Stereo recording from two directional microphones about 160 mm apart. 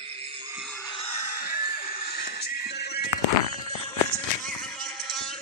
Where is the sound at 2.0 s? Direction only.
80° left.